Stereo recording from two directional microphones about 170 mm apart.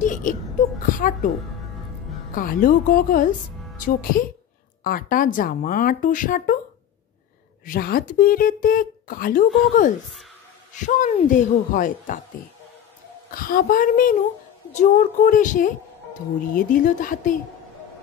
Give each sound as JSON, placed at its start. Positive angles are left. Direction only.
{"t": 0.0, "sound": "a sound", "side_deg": 50}
{"t": 2.3, "sound": "a woman's voice", "side_deg": 55}
{"t": 7.6, "sound": "a woman's voice", "side_deg": 55}
{"t": 10.7, "sound": "speech", "side_deg": 50}
{"t": 13.3, "sound": "a woman's voice", "side_deg": 55}